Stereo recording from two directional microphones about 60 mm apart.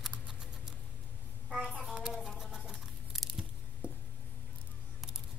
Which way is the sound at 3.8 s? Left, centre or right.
Right.